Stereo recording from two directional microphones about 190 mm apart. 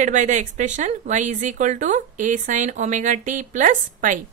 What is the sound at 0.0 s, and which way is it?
Speech, 40° right (ahead or behind).